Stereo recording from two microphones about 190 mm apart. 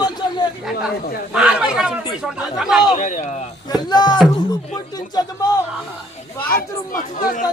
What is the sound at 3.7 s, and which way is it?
Speech, 20° left (ahead or behind).